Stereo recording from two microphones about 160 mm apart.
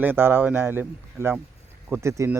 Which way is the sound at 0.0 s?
15° right (ahead or behind).